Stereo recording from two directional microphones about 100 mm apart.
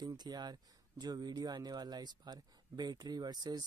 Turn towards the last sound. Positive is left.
turn(degrees=-45)  # may be behind; listen again after turning